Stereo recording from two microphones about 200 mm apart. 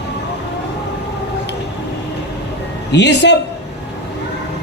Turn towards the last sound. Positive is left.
turn(degrees=60)  # may be behind; listen again after turning